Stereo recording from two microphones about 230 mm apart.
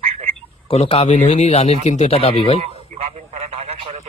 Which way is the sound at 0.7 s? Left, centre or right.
Left.